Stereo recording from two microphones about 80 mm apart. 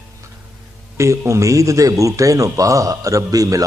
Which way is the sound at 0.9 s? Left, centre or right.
Right.